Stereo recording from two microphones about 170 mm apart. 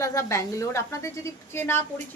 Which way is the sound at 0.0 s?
20° left (ahead or behind).